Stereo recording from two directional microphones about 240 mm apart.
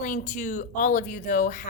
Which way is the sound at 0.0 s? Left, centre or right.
Left.